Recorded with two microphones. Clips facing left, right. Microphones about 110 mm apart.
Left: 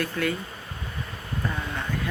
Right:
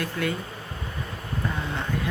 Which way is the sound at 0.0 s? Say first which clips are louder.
Left 1 dB; 20° right (ahead or behind).